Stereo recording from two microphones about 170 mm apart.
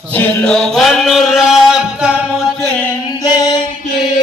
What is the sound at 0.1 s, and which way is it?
Chant, 5° left (ahead or behind).